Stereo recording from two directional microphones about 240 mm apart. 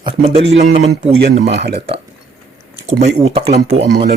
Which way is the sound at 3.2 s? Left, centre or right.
Right.